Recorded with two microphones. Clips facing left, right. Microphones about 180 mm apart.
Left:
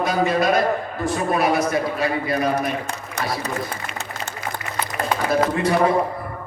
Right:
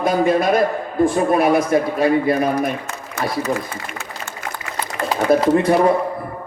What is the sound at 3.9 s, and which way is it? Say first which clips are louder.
Speech: even; 50° right (ahead or behind).